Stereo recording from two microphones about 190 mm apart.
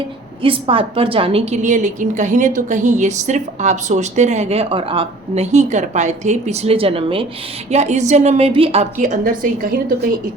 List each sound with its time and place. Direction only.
0.4 s a woman's voice: 30° right (ahead or behind); by 9.6 s 45° right (ahead or behind)